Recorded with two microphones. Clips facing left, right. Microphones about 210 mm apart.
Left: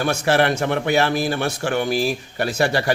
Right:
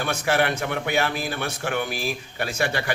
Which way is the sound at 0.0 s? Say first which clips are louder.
Left 5 dB; 40° left (ahead or behind).